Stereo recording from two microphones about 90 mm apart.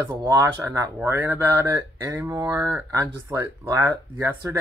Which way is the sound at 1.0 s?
25° right (ahead or behind).